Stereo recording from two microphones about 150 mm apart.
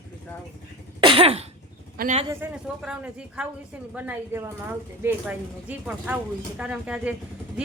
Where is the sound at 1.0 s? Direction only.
40° right (ahead or behind).